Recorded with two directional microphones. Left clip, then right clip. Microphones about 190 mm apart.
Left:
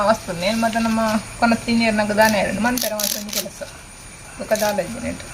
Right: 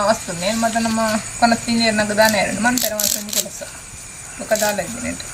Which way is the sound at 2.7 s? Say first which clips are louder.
Right 2 dB; centre (ahead or behind).